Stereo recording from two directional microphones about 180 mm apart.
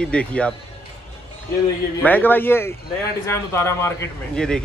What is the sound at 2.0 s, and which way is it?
A man's voice, 10° left (ahead or behind).